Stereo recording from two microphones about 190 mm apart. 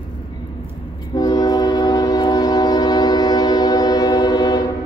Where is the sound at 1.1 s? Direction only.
20° left (ahead or behind).